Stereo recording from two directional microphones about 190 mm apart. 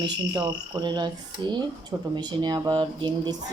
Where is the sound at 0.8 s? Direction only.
25° right (ahead or behind).